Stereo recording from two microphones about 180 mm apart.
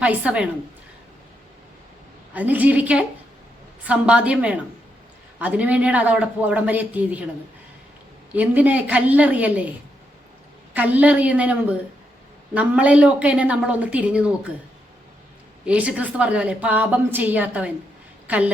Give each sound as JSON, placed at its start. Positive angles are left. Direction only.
{"t": 0.0, "sound": "a woman's voice", "side_deg": -5}
{"t": 2.3, "sound": "a woman's voice", "side_deg": -10}
{"t": 8.3, "sound": "a woman's voice", "side_deg": -10}
{"t": 10.8, "sound": "a woman's voice", "side_deg": -10}
{"t": 15.6, "sound": "a woman's voice", "side_deg": -5}